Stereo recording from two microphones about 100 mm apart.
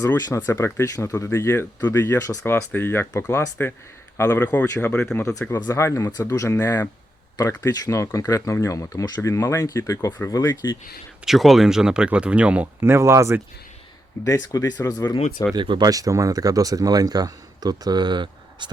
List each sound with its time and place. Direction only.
0.3 s speech: 25° left (ahead or behind)
4.2 s speech: 20° left (ahead or behind)
5.6 s speech: 30° left (ahead or behind)
6.1 s speech: 40° left (ahead or behind)
11.3 s speech: centre (ahead or behind)
12.8 s speech: 25° right (ahead or behind)
14.3 s speech: 35° left (ahead or behind)
15.5 s speech: 50° right (ahead or behind)
15.9 s speech: 35° right (ahead or behind); by 18.7 s 50° right (ahead or behind)